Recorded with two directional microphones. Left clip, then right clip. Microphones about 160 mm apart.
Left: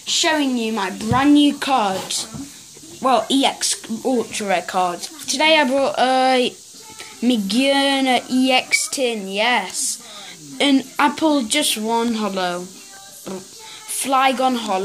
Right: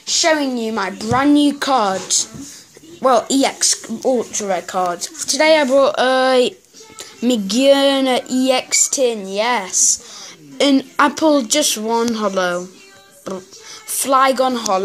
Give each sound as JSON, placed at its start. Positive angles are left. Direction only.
{"t": 0.0, "sound": "speech", "side_deg": -35}
{"t": 4.5, "sound": "speech", "side_deg": -10}
{"t": 14.0, "sound": "speech", "side_deg": -25}